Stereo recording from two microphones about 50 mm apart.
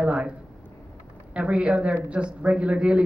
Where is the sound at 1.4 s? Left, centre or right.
Right.